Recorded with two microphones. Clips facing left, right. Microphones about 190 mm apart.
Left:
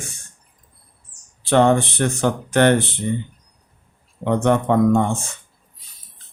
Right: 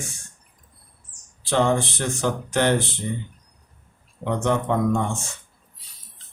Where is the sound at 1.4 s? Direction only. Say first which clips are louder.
Left 5 dB; 60° left (ahead or behind).